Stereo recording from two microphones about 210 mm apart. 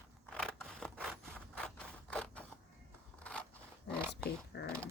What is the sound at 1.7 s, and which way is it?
Scrape, 5° left (ahead or behind).